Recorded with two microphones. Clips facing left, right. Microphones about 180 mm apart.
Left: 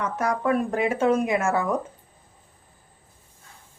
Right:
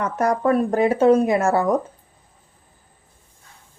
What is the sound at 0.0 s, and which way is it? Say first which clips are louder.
Speech: right 5 dB; 45° right (ahead or behind).